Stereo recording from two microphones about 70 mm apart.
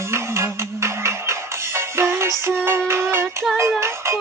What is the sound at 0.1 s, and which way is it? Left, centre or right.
Music, right.